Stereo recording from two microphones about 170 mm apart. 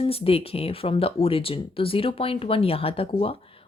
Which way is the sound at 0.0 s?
35° left (ahead or behind).